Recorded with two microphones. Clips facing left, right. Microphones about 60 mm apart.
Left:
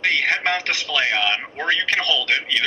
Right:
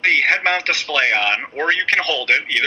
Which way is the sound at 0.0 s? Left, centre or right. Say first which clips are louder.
Right 4 dB; right.